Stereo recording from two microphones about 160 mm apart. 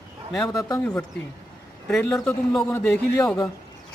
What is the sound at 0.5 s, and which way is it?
Speech, 20° left (ahead or behind).